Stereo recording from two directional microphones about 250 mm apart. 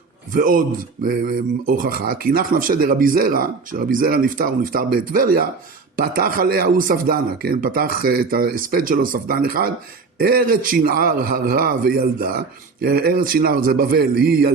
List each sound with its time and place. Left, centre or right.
0.3 s speech: right